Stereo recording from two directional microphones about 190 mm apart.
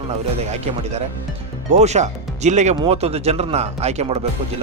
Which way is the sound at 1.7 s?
35° right (ahead or behind).